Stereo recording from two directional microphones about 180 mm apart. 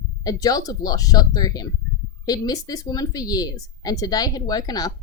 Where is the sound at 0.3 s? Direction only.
20° left (ahead or behind).